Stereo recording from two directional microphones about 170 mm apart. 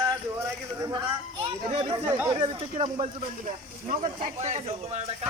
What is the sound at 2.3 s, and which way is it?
Speech, 30° right (ahead or behind).